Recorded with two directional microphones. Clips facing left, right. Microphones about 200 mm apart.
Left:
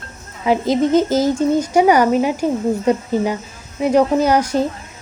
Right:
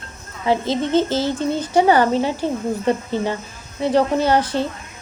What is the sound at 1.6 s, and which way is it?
Speech, 10° left (ahead or behind).